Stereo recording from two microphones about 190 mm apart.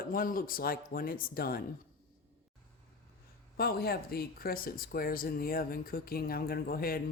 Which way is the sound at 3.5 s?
55° left (ahead or behind).